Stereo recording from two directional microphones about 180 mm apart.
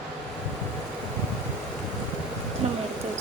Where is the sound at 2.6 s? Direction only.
35° right (ahead or behind).